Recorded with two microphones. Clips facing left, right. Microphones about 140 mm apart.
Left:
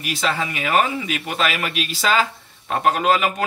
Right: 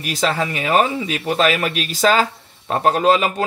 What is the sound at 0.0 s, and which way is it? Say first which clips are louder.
A man's voice: right 3 dB; 40° right (ahead or behind).